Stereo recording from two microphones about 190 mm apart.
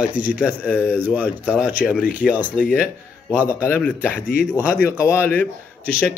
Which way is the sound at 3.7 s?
10° left (ahead or behind).